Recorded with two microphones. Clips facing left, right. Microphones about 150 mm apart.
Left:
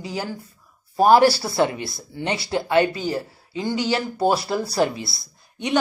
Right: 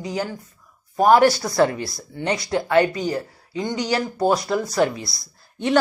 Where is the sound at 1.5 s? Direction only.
20° left (ahead or behind).